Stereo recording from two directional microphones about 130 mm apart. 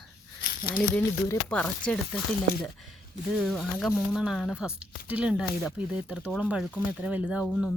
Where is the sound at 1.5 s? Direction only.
10° left (ahead or behind).